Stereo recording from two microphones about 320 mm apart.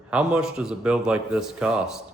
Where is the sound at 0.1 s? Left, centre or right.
Centre.